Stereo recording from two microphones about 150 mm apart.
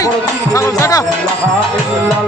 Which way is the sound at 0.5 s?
20° left (ahead or behind).